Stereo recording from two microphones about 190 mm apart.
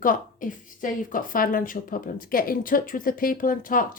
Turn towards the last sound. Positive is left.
turn(degrees=45)  # may be behind; listen again after turning